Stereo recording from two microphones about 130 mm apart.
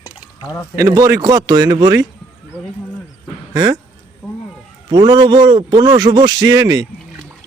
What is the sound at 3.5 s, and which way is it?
Speech, 30° right (ahead or behind).